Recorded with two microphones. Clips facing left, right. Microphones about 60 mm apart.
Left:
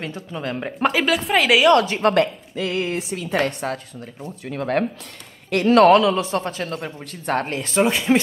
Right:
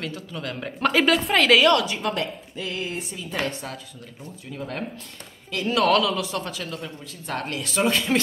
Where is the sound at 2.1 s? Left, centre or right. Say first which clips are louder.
Left 9 dB; left.